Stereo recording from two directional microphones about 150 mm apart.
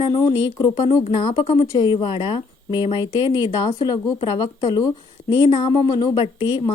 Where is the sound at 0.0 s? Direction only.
30° left (ahead or behind).